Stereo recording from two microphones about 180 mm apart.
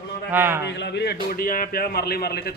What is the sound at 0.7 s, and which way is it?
A man's voice, 70° left (ahead or behind).